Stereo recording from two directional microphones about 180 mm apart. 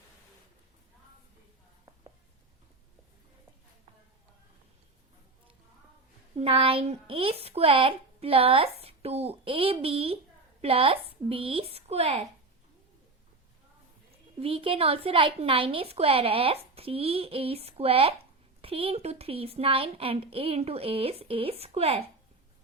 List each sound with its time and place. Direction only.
6.3 s speech: 30° right (ahead or behind)
14.4 s speech: 30° right (ahead or behind)